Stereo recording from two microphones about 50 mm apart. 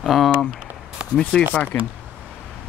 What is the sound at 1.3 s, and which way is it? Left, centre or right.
Speech, left.